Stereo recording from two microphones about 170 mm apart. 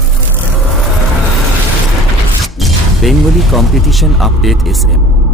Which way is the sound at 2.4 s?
Centre (ahead or behind).